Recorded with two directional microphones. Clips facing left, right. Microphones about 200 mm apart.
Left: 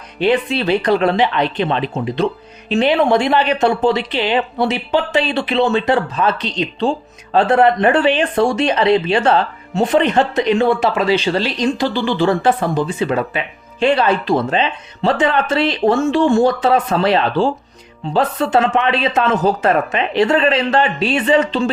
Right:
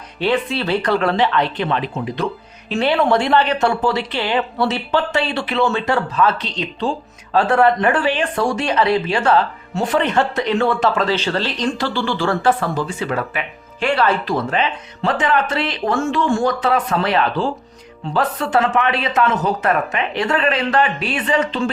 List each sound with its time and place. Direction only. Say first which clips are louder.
0.2 s speech: left 3 dB; 15° left (ahead or behind)